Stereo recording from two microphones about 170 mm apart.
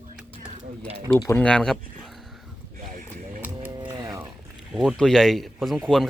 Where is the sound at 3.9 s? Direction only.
20° right (ahead or behind).